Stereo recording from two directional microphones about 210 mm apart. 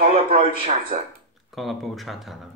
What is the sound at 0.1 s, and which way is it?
Speech, 25° right (ahead or behind).